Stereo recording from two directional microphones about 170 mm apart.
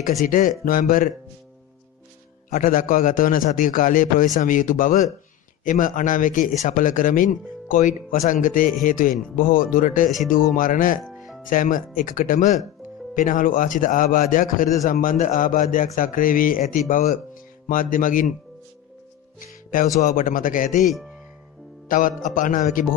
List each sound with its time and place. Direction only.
0.0 s a man's voice: 50° left (ahead or behind)
2.5 s a man's voice: 50° left (ahead or behind)
11.1 s music: centre (ahead or behind)
11.4 s a man's voice: 50° left (ahead or behind)
20.0 s a man's voice: 50° left (ahead or behind)
20.8 s speech: centre (ahead or behind)
21.8 s a man's voice: 50° left (ahead or behind)